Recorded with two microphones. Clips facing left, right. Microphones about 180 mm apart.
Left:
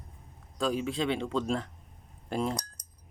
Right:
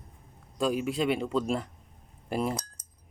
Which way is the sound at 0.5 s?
10° right (ahead or behind).